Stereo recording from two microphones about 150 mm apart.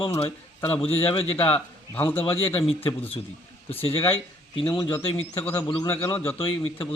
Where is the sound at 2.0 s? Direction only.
15° left (ahead or behind).